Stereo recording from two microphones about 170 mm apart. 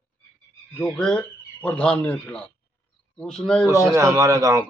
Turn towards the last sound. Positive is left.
turn(degrees=-20)  # may be behind; listen again after turning